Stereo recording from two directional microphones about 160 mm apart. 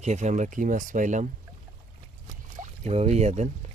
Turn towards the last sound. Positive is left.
turn(degrees=-45)  # may be behind; listen again after turning